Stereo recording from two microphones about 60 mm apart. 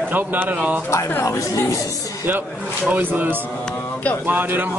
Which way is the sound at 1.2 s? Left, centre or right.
Left.